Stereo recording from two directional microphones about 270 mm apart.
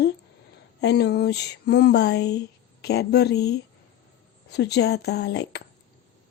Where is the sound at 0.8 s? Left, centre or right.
Left.